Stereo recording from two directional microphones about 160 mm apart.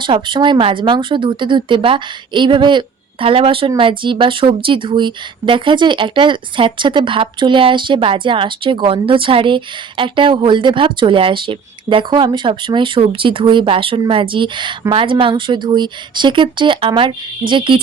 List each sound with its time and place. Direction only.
0.0 s speech: 30° right (ahead or behind)